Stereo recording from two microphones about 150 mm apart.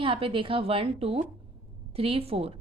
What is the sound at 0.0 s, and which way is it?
A woman's voice, 35° right (ahead or behind).